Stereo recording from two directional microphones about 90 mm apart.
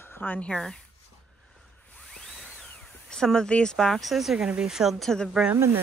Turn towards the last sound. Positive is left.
turn(degrees=-25)  # may be behind; listen again after turning